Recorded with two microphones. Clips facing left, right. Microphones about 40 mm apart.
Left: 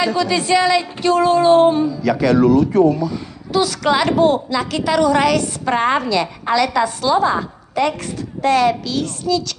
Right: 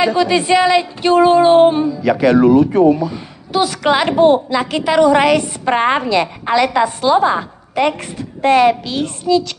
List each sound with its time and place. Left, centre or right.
0.0 s speech: right